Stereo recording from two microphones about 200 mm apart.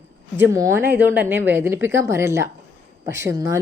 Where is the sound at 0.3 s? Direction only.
15° right (ahead or behind).